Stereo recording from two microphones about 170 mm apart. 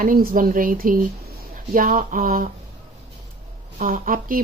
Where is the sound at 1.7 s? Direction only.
55° right (ahead or behind).